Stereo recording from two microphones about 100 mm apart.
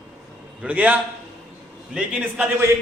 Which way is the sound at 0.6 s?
15° right (ahead or behind).